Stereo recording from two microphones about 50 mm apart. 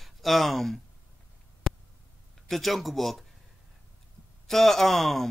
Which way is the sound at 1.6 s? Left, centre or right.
Centre.